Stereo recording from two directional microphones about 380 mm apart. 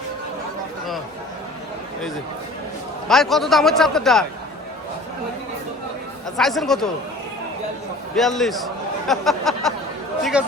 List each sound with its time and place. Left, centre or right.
3.1 s a man's voice: centre
6.3 s a man's voice: centre
8.1 s a man's voice: centre